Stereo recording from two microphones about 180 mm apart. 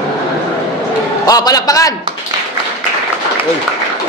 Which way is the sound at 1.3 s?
20° left (ahead or behind).